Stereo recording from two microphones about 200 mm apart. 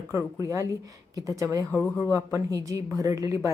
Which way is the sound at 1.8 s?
10° left (ahead or behind).